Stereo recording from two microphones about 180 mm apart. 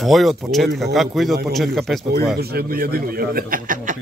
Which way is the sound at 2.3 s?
60° right (ahead or behind).